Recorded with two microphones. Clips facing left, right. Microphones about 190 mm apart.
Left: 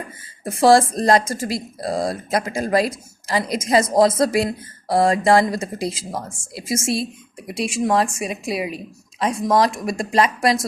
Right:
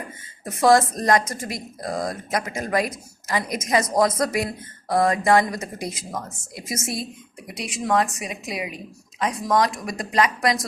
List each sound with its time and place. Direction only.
0.4 s a woman's voice: 30° left (ahead or behind)